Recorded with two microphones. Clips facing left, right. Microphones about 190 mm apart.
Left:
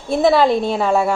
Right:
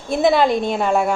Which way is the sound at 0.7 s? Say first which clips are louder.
Left 1 dB; centre (ahead or behind).